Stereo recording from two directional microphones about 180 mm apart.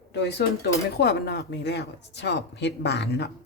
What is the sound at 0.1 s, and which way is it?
Speech, 70° left (ahead or behind).